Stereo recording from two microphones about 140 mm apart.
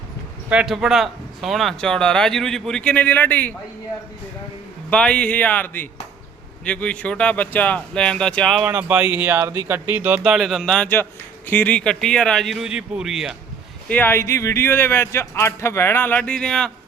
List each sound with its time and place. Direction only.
0.5 s speech: 5° right (ahead or behind); by 3.5 s 10° left (ahead or behind)
4.9 s speech: 10° left (ahead or behind)
8.6 s speech: 15° right (ahead or behind)
10.3 s speech: centre (ahead or behind)
13.8 s speech: 10° left (ahead or behind)